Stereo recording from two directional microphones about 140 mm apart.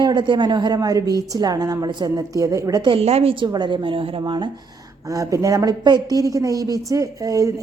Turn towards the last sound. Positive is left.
turn(degrees=-25)  # may be behind; listen again after turning